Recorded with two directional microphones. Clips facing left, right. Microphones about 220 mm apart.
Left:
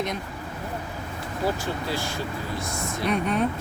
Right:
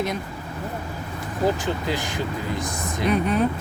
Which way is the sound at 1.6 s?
15° right (ahead or behind).